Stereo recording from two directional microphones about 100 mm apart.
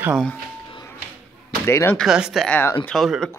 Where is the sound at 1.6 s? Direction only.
25° left (ahead or behind).